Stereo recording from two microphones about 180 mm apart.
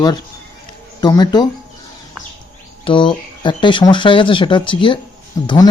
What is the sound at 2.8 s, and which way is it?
A man's voice, 25° left (ahead or behind).